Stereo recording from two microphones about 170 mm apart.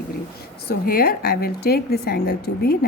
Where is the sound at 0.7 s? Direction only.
60° left (ahead or behind).